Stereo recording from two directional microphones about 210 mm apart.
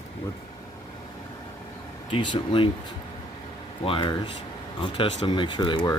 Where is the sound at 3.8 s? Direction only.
25° left (ahead or behind).